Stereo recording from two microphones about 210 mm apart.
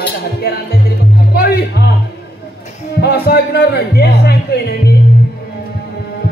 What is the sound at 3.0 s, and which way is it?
Speech, 50° left (ahead or behind).